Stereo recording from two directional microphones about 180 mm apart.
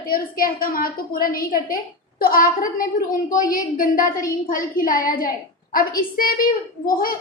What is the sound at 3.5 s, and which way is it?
A woman's voice, 50° left (ahead or behind).